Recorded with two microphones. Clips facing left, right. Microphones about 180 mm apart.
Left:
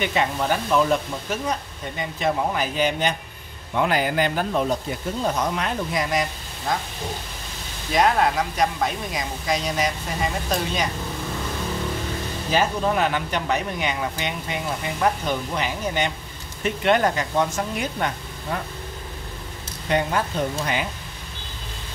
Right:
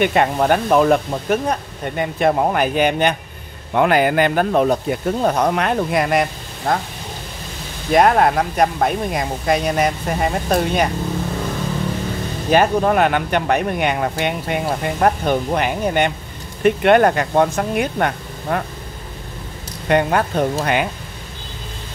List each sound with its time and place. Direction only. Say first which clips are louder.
0.0 s speech: right 7 dB; 55° right (ahead or behind)
7.9 s speech: right 6 dB; 55° right (ahead or behind)
12.4 s speech: right 7 dB; 60° right (ahead or behind)
19.9 s speech: right 6 dB; 60° right (ahead or behind)